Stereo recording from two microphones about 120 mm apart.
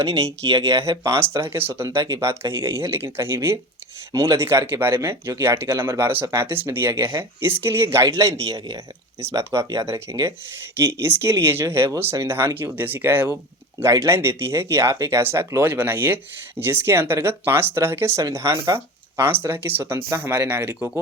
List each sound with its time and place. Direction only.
0.0 s speech: 25° right (ahead or behind)